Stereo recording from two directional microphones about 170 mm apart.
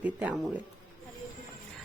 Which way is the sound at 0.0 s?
10° right (ahead or behind).